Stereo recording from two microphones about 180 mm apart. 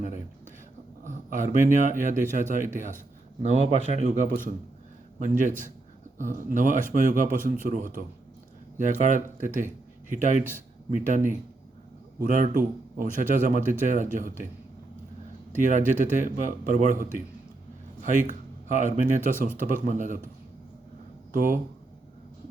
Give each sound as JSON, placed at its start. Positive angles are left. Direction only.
{"t": 1.0, "sound": "a man's voice", "side_deg": -45}
{"t": 15.5, "sound": "speech", "side_deg": -45}
{"t": 21.3, "sound": "speech", "side_deg": -50}